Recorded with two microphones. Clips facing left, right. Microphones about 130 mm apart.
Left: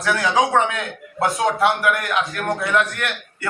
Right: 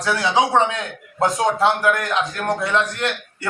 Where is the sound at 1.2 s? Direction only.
30° right (ahead or behind).